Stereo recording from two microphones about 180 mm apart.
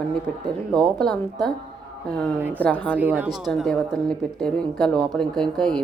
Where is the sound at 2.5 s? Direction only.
10° left (ahead or behind).